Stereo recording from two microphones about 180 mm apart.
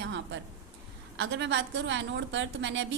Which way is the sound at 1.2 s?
90° right.